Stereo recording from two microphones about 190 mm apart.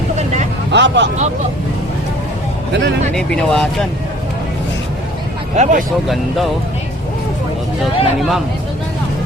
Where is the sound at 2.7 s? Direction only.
65° right (ahead or behind).